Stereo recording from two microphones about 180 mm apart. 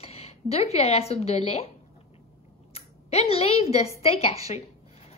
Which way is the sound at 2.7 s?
35° left (ahead or behind).